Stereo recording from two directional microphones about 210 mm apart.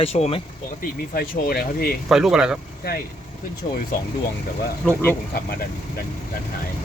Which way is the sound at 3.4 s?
40° left (ahead or behind).